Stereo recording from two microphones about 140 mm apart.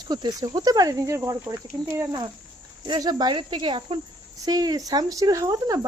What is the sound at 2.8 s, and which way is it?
Speech, 30° right (ahead or behind).